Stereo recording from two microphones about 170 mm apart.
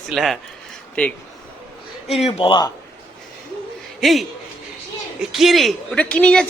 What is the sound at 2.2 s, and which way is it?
Speech, 30° left (ahead or behind).